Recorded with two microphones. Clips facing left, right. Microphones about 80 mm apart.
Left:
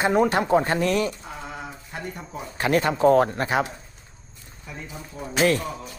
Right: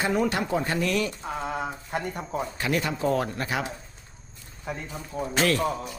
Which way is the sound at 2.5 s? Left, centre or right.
Left.